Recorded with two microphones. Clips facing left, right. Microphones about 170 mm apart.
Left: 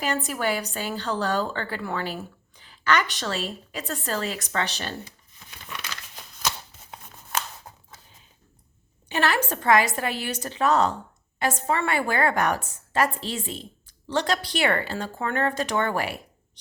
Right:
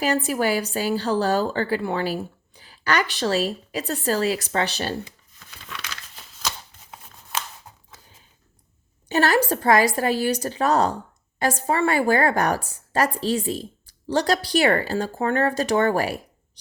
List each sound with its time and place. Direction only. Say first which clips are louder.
0.0 s a woman's voice: right 5 dB; 35° right (ahead or behind)
2.6 s a sound: right 1 dB; 35° right (ahead or behind)
3.2 s a woman's voice: right 7 dB; 35° right (ahead or behind)
9.0 s a woman's voice: right 5 dB; 40° right (ahead or behind)